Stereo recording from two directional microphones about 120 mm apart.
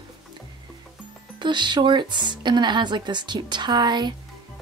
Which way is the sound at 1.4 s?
40° right (ahead or behind).